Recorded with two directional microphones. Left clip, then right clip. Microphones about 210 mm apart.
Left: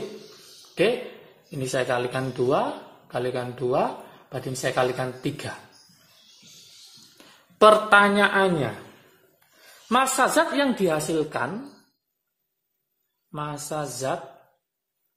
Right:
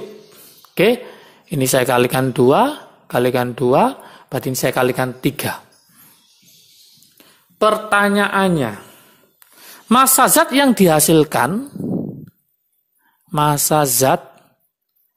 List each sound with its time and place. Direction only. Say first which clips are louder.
1.6 s speech: right 10 dB; 50° right (ahead or behind)
7.2 s a sound: even; 15° right (ahead or behind)
7.9 s speech: right 2 dB; 30° right (ahead or behind)
9.8 s speech: right 8 dB; 45° right (ahead or behind)
13.3 s speech: right 16 dB; 50° right (ahead or behind)